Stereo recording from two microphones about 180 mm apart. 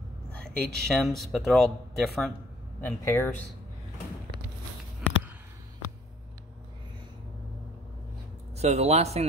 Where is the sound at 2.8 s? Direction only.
15° left (ahead or behind).